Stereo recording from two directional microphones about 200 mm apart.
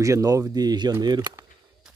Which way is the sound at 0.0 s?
15° right (ahead or behind).